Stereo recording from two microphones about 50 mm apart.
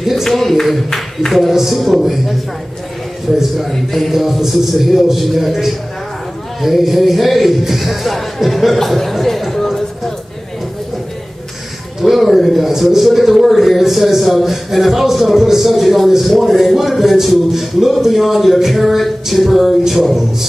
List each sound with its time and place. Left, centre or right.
0.0 s a man's voice: centre
3.3 s a man's voice: centre
12.0 s a man's voice: centre